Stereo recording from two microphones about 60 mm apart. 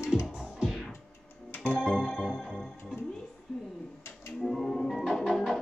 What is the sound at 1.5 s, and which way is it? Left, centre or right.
Music, left.